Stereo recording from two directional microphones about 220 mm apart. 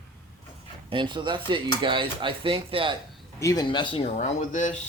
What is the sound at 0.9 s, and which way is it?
Speech, 20° right (ahead or behind).